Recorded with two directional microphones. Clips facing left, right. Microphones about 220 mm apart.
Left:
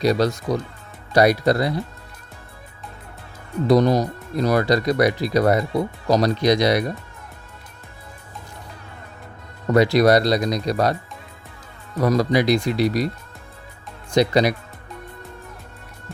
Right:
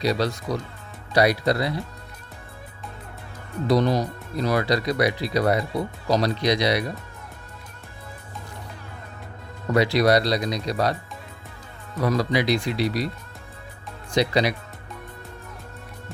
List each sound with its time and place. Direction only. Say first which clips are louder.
0.0 s speech: left 5 dB; 45° left (ahead or behind)
3.7 s speech: left 4 dB; 45° left (ahead or behind)
9.7 s speech: left 4 dB; 45° left (ahead or behind)
11.9 s speech: left 4 dB; 45° left (ahead or behind)
14.1 s speech: left 4 dB; 45° left (ahead or behind)